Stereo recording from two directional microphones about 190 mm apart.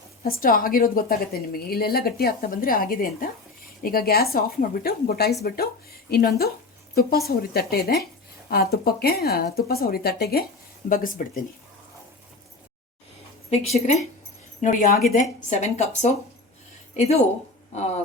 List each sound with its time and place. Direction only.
0.2 s a woman's voice: 50° left (ahead or behind)
13.5 s a woman's voice: 35° left (ahead or behind)
15.4 s speech: 35° left (ahead or behind)
17.7 s speech: 35° left (ahead or behind)